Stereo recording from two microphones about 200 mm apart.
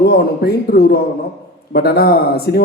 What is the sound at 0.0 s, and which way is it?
A man's voice, 50° left (ahead or behind).